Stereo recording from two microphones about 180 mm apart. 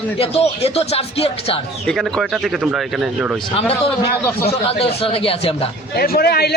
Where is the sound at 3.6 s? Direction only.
30° left (ahead or behind).